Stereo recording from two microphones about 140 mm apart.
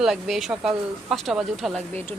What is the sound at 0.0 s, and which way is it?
Speech, centre (ahead or behind).